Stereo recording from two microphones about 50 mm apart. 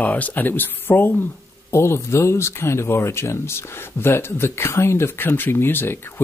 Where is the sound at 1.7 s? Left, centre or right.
Left.